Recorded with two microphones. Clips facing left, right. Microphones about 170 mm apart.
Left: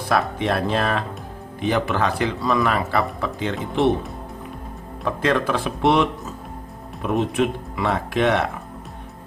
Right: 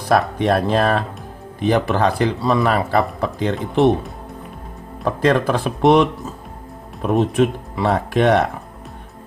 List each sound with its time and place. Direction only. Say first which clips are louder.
0.1 s speech: right 5 dB; 40° right (ahead or behind)
5.0 s speech: right 4 dB; 40° right (ahead or behind)
7.1 s speech: right 4 dB; 40° right (ahead or behind)